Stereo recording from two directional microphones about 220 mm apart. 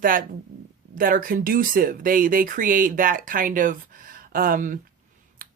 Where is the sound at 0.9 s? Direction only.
40° right (ahead or behind).